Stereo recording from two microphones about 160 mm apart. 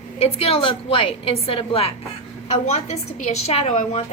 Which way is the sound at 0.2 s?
40° left (ahead or behind).